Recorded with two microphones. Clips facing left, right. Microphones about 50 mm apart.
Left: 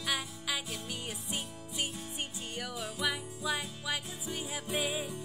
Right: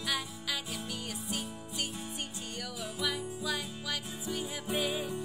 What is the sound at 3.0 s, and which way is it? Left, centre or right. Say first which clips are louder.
Music: even; centre.